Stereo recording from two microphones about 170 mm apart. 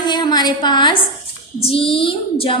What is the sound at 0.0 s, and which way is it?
A woman's voice, 25° left (ahead or behind).